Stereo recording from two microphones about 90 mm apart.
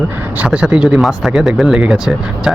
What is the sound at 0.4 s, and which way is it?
Speech, 10° right (ahead or behind).